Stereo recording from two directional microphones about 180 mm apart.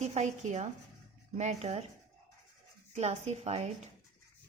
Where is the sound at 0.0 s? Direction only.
40° right (ahead or behind).